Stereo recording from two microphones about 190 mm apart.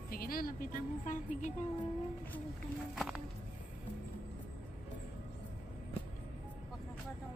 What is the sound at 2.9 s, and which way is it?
Music, centre (ahead or behind).